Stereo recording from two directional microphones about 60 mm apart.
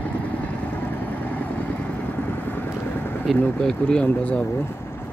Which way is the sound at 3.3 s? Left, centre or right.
Centre.